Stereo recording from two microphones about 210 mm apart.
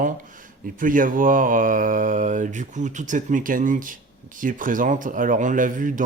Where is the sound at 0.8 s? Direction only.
40° right (ahead or behind).